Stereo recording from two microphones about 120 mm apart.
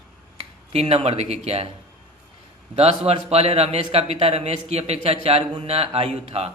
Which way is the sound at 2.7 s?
60° right (ahead or behind).